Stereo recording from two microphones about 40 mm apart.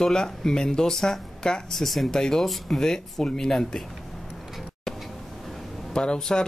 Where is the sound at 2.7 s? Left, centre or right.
Centre.